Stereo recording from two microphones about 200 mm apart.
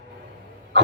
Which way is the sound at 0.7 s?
60° right (ahead or behind).